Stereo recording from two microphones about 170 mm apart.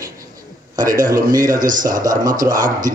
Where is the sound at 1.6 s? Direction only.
50° right (ahead or behind).